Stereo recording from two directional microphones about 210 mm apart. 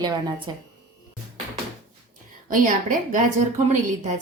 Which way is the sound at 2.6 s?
40° right (ahead or behind).